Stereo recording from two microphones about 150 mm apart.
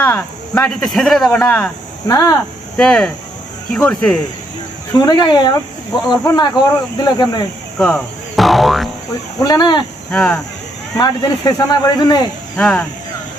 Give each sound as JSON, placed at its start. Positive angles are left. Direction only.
{"t": 0.0, "sound": "speech", "side_deg": 15}
{"t": 0.7, "sound": "a man's voice", "side_deg": 0}
{"t": 2.0, "sound": "speech", "side_deg": 25}
{"t": 2.7, "sound": "a man's voice", "side_deg": 5}
{"t": 4.9, "sound": "speech", "side_deg": 30}
{"t": 7.8, "sound": "speech", "side_deg": 5}
{"t": 9.4, "sound": "speech", "side_deg": 25}
{"t": 10.1, "sound": "a man's voice", "side_deg": 5}
{"t": 10.9, "sound": "speech", "side_deg": 25}
{"t": 12.5, "sound": "a man's voice", "side_deg": 5}